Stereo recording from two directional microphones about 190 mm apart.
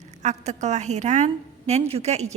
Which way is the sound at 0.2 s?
35° right (ahead or behind).